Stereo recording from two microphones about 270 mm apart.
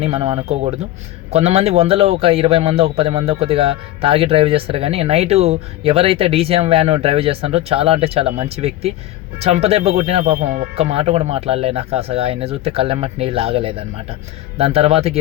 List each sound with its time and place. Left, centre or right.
0.0 s a man's voice: right